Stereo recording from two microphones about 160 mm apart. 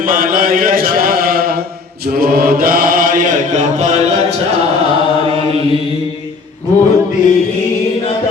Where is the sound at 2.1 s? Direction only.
70° right (ahead or behind); by 4.3 s 45° right (ahead or behind).